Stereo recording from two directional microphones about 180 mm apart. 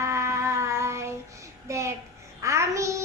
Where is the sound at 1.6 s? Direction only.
15° right (ahead or behind).